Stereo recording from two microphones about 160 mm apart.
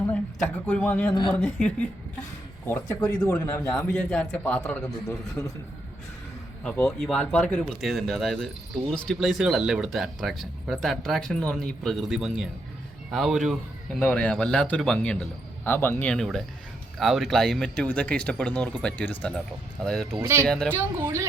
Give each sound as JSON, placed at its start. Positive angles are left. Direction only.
{"t": 0.0, "sound": "speech", "side_deg": 10}
{"t": 3.9, "sound": "speech", "side_deg": 5}
{"t": 5.4, "sound": "a man's voice", "side_deg": 20}
{"t": 7.0, "sound": "speech", "side_deg": 5}
{"t": 20.2, "sound": "speech", "side_deg": -15}